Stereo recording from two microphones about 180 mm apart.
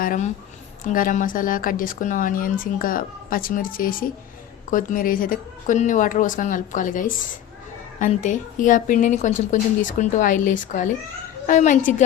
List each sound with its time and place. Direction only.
0.0 s speech: 50° left (ahead or behind)